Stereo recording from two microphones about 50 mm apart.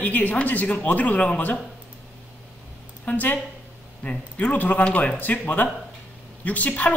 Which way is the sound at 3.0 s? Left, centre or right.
Left.